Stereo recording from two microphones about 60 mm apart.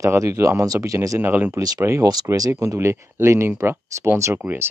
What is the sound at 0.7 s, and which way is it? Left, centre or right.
Speech, right.